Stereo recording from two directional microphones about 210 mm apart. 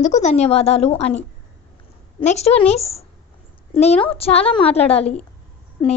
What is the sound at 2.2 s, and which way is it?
A woman's voice, 30° left (ahead or behind).